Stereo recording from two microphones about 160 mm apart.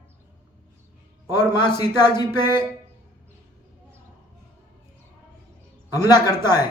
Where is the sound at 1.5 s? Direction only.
25° left (ahead or behind).